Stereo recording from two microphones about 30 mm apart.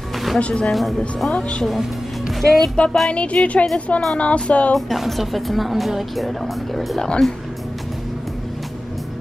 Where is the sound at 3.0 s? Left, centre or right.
Left.